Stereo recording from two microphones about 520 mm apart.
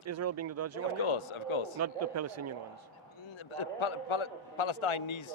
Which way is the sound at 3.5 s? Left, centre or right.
Left.